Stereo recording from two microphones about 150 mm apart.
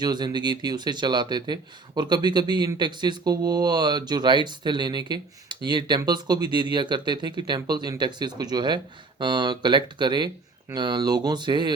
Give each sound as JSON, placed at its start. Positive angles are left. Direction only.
{"t": 0.0, "sound": "speech", "side_deg": -30}